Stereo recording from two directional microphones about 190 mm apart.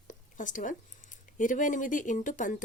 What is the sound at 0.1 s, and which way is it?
Speech, 45° left (ahead or behind).